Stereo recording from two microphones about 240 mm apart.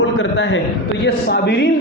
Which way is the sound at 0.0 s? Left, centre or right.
Left.